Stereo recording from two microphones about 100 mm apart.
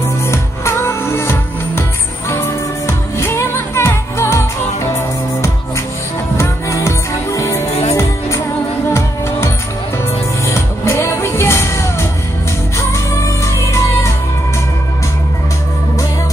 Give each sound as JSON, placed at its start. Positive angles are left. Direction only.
{"t": 0.3, "sound": "music", "side_deg": 25}
{"t": 6.3, "sound": "music", "side_deg": 30}
{"t": 10.4, "sound": "music", "side_deg": 30}